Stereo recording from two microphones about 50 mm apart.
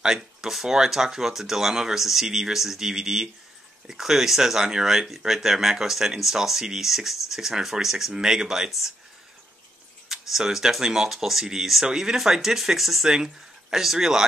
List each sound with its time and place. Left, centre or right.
0.0 s speech: centre
10.0 s speech: centre